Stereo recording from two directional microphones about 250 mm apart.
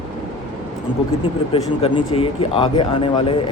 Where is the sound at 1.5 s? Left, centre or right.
Left.